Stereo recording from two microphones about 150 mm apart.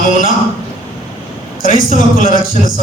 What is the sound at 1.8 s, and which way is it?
Speech, 65° left (ahead or behind).